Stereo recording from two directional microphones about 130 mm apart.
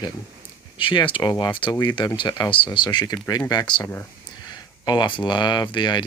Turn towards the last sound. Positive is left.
turn(degrees=35)  # may be behind; listen again after turning